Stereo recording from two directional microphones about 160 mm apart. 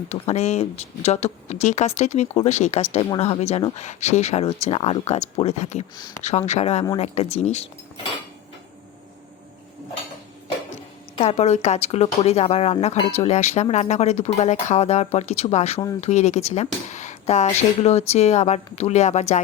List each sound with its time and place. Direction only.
0.1 s a woman's voice: 45° left (ahead or behind)
11.2 s a woman's voice: 40° left (ahead or behind)